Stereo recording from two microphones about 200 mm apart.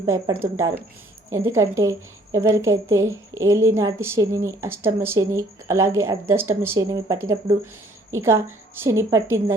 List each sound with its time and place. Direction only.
0.0 s a woman's voice: 15° right (ahead or behind)